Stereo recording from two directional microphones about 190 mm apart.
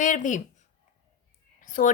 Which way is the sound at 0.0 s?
40° left (ahead or behind).